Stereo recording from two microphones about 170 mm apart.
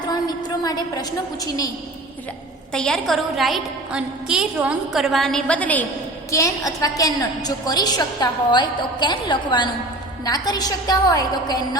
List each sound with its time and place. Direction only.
0.6 s a woman's voice: 20° left (ahead or behind)
2.7 s a woman's voice: 5° left (ahead or behind)
6.3 s a woman's voice: 20° left (ahead or behind)